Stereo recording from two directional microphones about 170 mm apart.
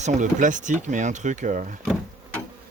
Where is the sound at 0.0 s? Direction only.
45° right (ahead or behind).